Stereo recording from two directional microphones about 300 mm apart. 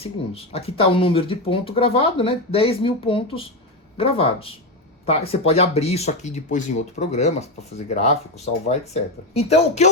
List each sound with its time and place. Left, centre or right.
0.0 s speech: centre
8.6 s speech: left